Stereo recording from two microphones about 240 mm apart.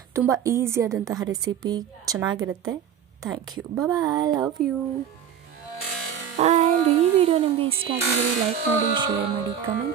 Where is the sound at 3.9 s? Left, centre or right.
Centre.